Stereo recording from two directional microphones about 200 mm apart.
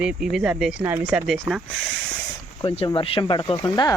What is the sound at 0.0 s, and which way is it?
Speech, 5° right (ahead or behind).